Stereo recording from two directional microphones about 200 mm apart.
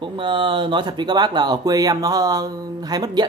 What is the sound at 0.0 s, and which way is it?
Mantra, 25° right (ahead or behind).